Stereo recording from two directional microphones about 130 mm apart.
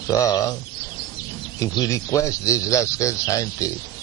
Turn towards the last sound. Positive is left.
turn(degrees=25)  # may be behind; listen again after turning